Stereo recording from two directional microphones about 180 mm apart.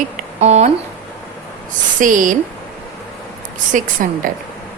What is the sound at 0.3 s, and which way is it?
Speech, 35° right (ahead or behind).